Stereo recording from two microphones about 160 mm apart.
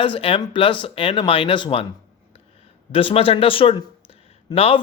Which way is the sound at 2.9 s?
35° left (ahead or behind).